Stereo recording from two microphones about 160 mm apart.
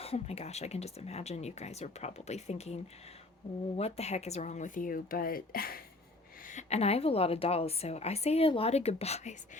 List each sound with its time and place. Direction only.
0.0 s speech: 40° left (ahead or behind)
3.8 s speech: 40° left (ahead or behind); by 5.8 s 65° left (ahead or behind)
6.5 s a woman's voice: 45° left (ahead or behind)